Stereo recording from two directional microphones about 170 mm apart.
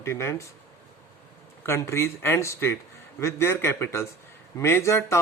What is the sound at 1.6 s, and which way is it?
Speech, 15° left (ahead or behind).